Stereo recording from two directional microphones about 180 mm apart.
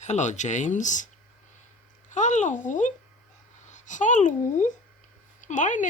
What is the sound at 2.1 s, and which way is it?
Speech, 45° left (ahead or behind).